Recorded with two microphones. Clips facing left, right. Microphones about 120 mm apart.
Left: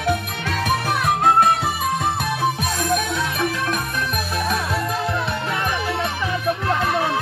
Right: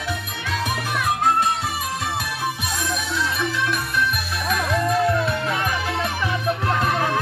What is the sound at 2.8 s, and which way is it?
Music, 50° left (ahead or behind).